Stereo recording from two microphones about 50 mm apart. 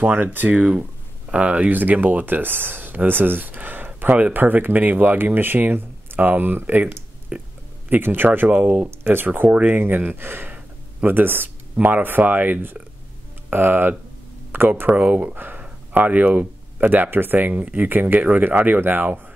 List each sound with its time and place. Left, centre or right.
0.0 s speech: right
1.3 s speech: right
7.9 s speech: right
8.5 s speech: right
9.0 s speech: right
10.5 s a sound: right
11.8 s speech: right
13.5 s speech: right
15.0 s speech: right
15.3 s speech: right